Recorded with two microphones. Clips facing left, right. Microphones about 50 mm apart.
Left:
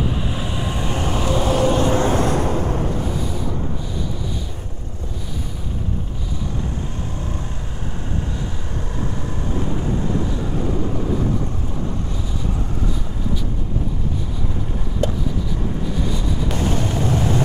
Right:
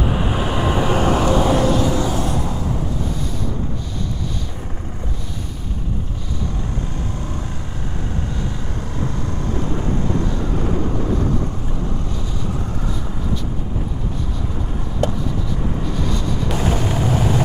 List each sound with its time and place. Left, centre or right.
0.0 s vehicle: right
1.2 s vehicle: centre
1.8 s a sound: left
16.5 s vehicle: centre